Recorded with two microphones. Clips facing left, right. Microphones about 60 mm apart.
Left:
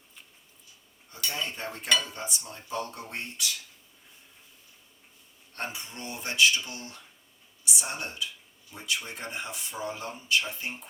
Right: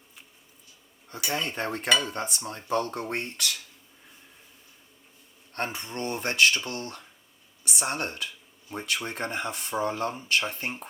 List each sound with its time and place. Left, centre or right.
1.3 s cutlery: right
5.5 s speech: right
6.7 s cutlery: right
8.7 s speech: right